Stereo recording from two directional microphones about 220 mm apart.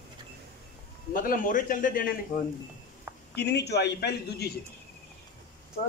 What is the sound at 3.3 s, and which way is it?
A man's voice, 50° left (ahead or behind).